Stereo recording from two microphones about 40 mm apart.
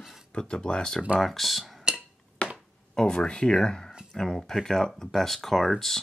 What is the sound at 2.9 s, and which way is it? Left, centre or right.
Speech, centre.